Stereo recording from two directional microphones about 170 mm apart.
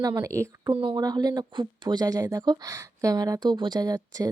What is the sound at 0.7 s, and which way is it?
Speech, 30° right (ahead or behind).